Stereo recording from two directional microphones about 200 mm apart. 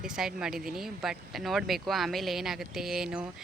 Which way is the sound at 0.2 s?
5° right (ahead or behind).